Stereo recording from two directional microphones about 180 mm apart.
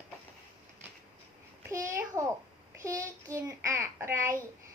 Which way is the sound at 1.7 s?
15° right (ahead or behind).